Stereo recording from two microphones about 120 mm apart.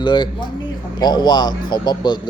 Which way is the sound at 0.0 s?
40° left (ahead or behind).